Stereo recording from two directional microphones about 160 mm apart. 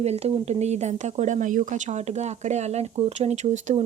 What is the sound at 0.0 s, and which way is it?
Speech, 40° right (ahead or behind).